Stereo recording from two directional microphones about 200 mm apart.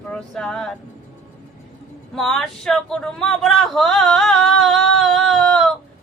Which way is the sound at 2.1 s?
Centre (ahead or behind).